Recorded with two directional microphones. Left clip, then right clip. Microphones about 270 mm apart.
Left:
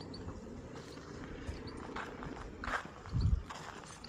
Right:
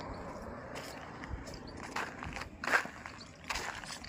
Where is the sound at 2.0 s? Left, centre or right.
Right.